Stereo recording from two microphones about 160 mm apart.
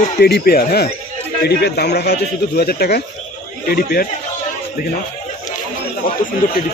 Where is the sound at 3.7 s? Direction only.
70° left (ahead or behind).